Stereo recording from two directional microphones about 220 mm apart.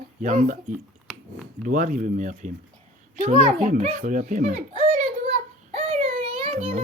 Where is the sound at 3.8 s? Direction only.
35° right (ahead or behind).